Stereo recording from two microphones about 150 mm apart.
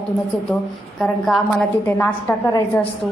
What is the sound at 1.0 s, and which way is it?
A woman's voice, 5° left (ahead or behind).